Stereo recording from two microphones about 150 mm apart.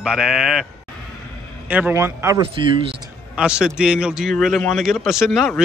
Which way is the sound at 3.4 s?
5° right (ahead or behind).